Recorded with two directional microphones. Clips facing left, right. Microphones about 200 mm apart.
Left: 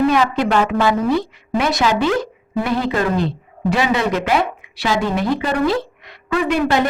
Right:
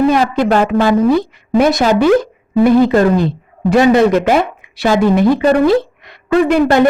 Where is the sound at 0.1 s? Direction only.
45° right (ahead or behind).